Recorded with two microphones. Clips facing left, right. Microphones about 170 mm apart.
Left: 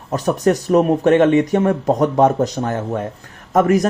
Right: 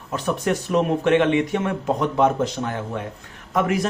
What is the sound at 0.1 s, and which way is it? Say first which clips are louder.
Speech: left 6 dB; 40° left (ahead or behind).